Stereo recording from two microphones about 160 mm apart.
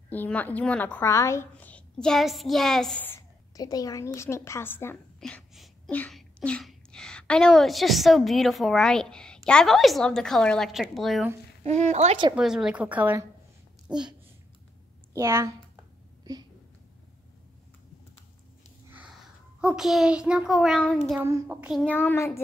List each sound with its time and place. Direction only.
0.1 s a woman's voice: 10° left (ahead or behind)
3.1 s a woman's voice: 20° left (ahead or behind); by 11.2 s centre (ahead or behind)
11.6 s speech: 45° right (ahead or behind)
12.4 s speech: 5° right (ahead or behind)
15.1 s a woman's voice: 15° right (ahead or behind)
18.9 s a child's voice: 5° right (ahead or behind)
21.2 s speech: 10° right (ahead or behind)
21.8 s a woman's voice: 10° left (ahead or behind)